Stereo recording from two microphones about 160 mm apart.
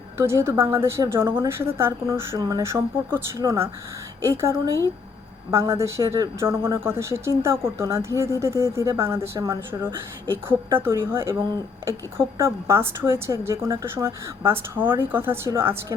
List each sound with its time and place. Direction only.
0.2 s speech: 15° right (ahead or behind)